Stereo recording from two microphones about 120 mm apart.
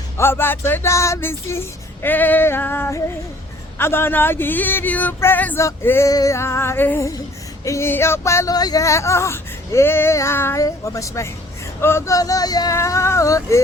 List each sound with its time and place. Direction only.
0.2 s speech: 20° left (ahead or behind)